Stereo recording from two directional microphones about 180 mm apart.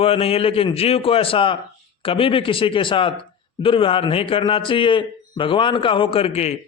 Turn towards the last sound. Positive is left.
turn(degrees=35)  # may be behind; listen again after turning